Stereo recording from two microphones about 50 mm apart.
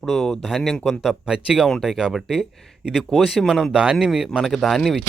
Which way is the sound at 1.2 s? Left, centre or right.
Centre.